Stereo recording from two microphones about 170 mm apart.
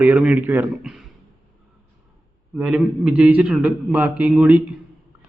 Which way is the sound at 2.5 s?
5° right (ahead or behind).